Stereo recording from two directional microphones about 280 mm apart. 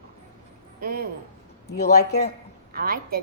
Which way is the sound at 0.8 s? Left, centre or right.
Right.